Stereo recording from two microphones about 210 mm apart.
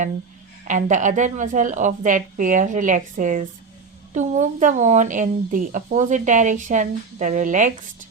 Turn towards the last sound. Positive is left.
turn(degrees=-35)  # may be behind; listen again after turning